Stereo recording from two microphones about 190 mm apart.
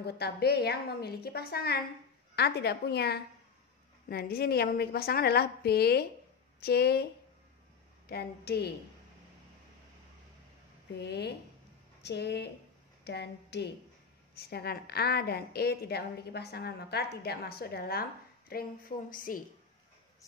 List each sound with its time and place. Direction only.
0.0 s a woman's voice: 55° left (ahead or behind)
8.1 s a woman's voice: 55° left (ahead or behind)
11.0 s a woman's voice: 60° left (ahead or behind); by 19.4 s 45° left (ahead or behind)